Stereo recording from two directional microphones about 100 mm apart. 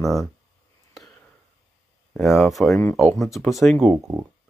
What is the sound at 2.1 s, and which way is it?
Speech, centre (ahead or behind).